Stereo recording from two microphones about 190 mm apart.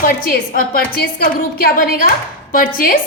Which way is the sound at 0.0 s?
50° left (ahead or behind).